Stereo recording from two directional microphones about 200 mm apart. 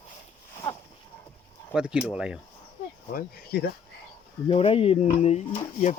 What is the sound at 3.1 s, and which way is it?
Speech, 50° left (ahead or behind).